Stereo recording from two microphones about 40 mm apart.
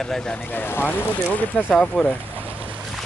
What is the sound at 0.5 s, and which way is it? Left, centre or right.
Speech, left.